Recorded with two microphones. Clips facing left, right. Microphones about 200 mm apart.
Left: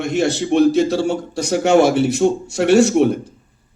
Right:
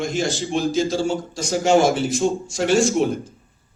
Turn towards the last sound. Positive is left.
turn(degrees=65)  # may be behind; listen again after turning